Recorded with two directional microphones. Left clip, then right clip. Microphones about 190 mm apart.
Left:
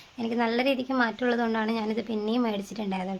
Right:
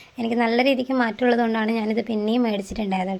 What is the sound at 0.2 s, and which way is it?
A woman's voice, 20° right (ahead or behind).